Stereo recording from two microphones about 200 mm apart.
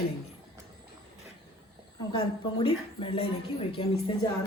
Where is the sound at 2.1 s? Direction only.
25° left (ahead or behind).